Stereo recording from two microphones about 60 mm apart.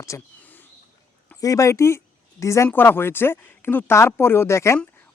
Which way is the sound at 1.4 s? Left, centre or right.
Left.